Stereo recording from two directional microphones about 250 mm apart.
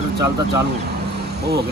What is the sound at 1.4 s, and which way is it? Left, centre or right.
Speech, right.